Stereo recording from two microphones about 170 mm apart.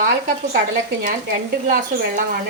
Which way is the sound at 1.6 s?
55° right (ahead or behind).